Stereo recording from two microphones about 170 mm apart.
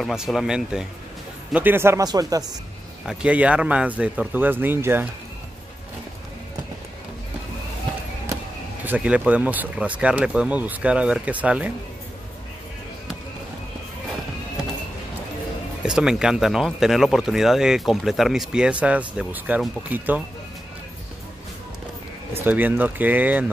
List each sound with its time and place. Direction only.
0.0 s speech: centre (ahead or behind); by 2.4 s 20° right (ahead or behind)
3.1 s speech: 5° right (ahead or behind)
8.8 s speech: 10° right (ahead or behind)
15.8 s speech: 5° right (ahead or behind)
22.3 s speech: 10° right (ahead or behind)